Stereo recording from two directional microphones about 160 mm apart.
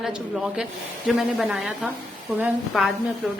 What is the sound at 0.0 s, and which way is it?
A woman's voice, 5° right (ahead or behind).